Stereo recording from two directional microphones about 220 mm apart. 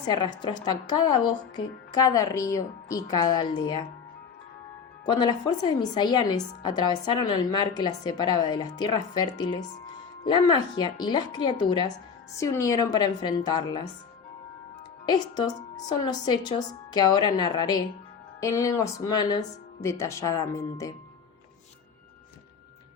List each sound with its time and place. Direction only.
0.1 s a woman's voice: 20° left (ahead or behind)
5.0 s a woman's voice: 20° left (ahead or behind)
15.0 s a woman's voice: 20° left (ahead or behind)